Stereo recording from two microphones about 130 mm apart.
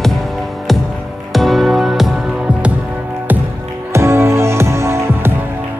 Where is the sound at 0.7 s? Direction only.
Centre (ahead or behind).